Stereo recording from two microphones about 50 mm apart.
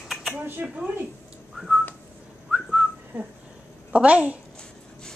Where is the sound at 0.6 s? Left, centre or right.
Right.